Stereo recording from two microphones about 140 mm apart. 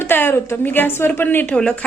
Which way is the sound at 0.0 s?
15° left (ahead or behind).